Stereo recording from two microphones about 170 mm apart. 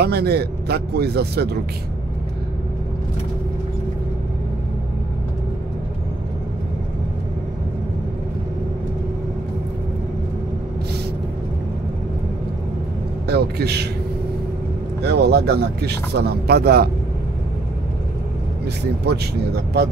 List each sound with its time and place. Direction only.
0.0 s speech: 70° right (ahead or behind)
13.3 s speech: 70° right (ahead or behind)
15.0 s speech: 75° right (ahead or behind)
19.0 s speech: 75° right (ahead or behind)